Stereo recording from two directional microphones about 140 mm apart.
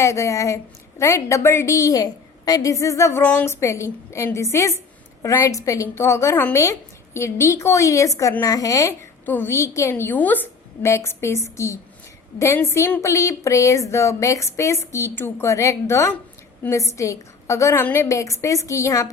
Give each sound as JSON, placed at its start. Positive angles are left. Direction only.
{"t": 0.0, "sound": "a woman's voice", "side_deg": 20}